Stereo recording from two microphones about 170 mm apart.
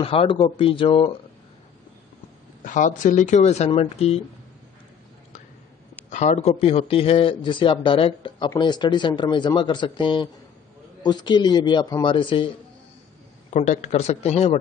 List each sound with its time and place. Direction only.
0.0 s speech: 35° left (ahead or behind)
2.6 s speech: 50° left (ahead or behind)
6.0 s speech: 45° left (ahead or behind); by 12.4 s 30° left (ahead or behind)
13.5 s speech: 45° left (ahead or behind)